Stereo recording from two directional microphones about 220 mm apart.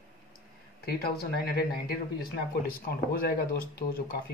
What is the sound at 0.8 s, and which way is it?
Speech, 45° left (ahead or behind).